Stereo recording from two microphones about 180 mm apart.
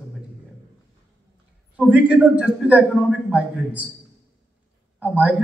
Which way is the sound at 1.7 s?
5° right (ahead or behind).